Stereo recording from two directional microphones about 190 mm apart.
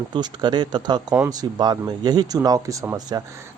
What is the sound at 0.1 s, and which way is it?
Speech, 25° right (ahead or behind).